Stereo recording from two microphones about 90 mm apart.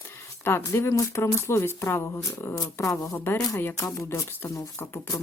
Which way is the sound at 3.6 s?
25° left (ahead or behind).